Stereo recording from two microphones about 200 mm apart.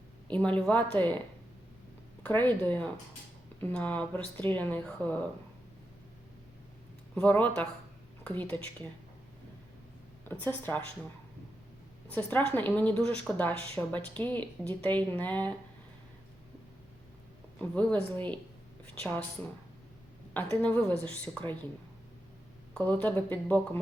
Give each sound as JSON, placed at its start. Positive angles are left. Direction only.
{"t": 0.3, "sound": "speech", "side_deg": 5}
{"t": 2.2, "sound": "speech", "side_deg": 10}
{"t": 7.2, "sound": "a woman's voice", "side_deg": 5}
{"t": 10.4, "sound": "speech", "side_deg": 10}
{"t": 12.1, "sound": "speech", "side_deg": 10}
{"t": 17.6, "sound": "speech", "side_deg": 5}
{"t": 20.6, "sound": "speech", "side_deg": 5}
{"t": 22.7, "sound": "speech", "side_deg": 5}